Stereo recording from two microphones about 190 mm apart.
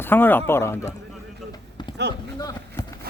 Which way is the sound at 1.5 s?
25° left (ahead or behind).